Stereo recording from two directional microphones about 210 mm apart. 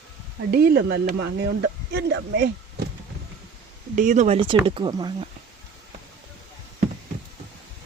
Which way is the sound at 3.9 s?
35° right (ahead or behind).